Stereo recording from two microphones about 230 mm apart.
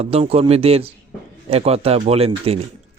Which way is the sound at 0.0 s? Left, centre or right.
Right.